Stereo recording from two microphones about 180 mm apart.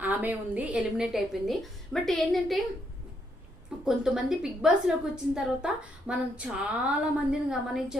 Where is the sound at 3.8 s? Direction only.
5° right (ahead or behind).